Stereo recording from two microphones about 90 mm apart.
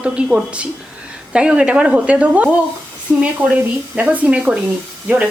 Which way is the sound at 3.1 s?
25° right (ahead or behind).